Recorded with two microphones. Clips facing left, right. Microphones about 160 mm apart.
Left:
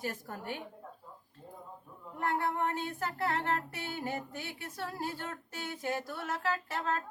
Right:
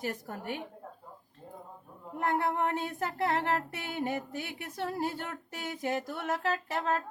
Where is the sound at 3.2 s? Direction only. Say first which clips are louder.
Right 3 dB; 20° right (ahead or behind).